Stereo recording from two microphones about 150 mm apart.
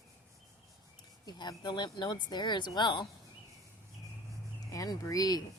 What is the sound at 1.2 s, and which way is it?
Speech, 30° left (ahead or behind).